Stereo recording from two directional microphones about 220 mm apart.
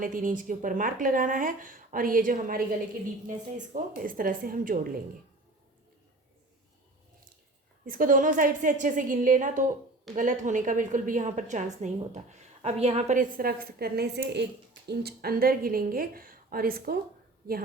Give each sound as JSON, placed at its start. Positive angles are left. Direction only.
{"t": 0.0, "sound": "a woman's voice", "side_deg": -40}
{"t": 7.9, "sound": "a woman's voice", "side_deg": -40}